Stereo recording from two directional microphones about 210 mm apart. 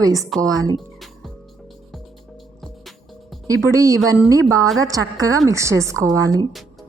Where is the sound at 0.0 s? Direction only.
15° right (ahead or behind).